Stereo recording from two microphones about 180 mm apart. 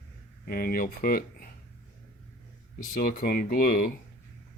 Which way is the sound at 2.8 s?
50° left (ahead or behind).